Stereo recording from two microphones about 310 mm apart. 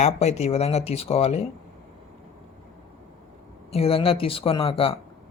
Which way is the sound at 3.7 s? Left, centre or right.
Centre.